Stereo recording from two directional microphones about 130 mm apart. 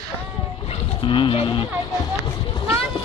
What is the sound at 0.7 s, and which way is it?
Speech, 40° left (ahead or behind).